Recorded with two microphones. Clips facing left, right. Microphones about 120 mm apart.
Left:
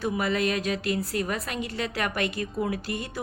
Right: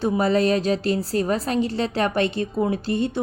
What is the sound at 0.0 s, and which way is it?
A woman's voice, 30° right (ahead or behind).